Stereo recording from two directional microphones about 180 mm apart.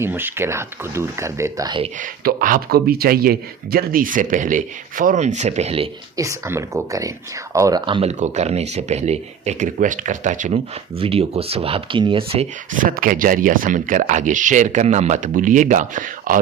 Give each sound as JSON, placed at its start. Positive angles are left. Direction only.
{"t": 0.0, "sound": "speech", "side_deg": -10}
{"t": 2.0, "sound": "speech", "side_deg": -50}
{"t": 6.1, "sound": "speech", "side_deg": -15}
{"t": 8.2, "sound": "speech", "side_deg": -40}
{"t": 10.9, "sound": "speech", "side_deg": -30}
{"t": 12.7, "sound": "speech", "side_deg": -50}